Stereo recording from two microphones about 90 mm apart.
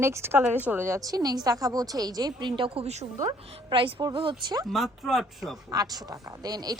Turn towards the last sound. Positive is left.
turn(degrees=-45)  # may be behind; listen again after turning